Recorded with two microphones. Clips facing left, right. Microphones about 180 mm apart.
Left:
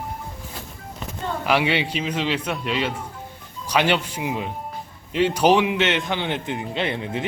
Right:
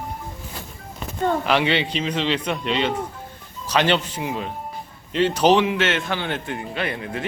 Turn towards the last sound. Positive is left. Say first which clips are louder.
# left 2 dB
turn(degrees=25)  # may be behind; listen again after turning